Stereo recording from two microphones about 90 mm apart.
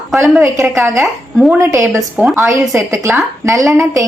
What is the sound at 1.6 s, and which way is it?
A woman's voice, 35° right (ahead or behind).